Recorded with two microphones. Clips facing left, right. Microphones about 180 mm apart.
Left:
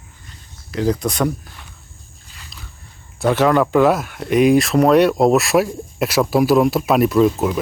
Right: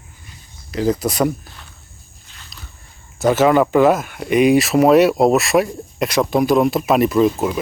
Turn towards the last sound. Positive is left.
turn(degrees=0)  # may be behind; listen again after turning